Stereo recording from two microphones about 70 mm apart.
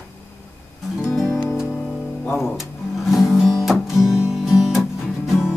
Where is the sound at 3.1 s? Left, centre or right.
Centre.